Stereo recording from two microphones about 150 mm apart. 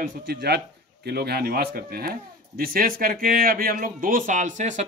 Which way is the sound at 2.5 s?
75° right (ahead or behind).